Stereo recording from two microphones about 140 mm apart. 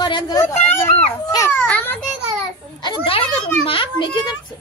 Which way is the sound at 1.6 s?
10° left (ahead or behind).